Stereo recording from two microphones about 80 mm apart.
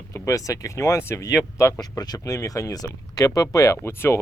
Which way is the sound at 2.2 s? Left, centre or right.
Left.